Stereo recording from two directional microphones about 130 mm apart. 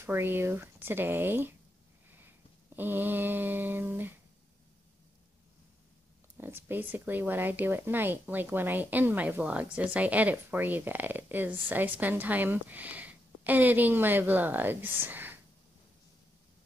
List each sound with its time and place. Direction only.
0.0 s speech: 20° right (ahead or behind)
2.2 s a sound: 15° right (ahead or behind)
6.3 s speech: 15° right (ahead or behind)